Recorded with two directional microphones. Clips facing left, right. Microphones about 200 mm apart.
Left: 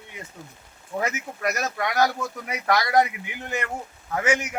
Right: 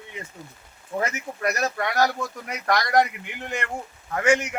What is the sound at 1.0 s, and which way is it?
Speech, centre (ahead or behind).